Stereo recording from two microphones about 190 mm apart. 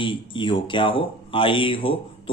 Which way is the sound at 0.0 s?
25° left (ahead or behind).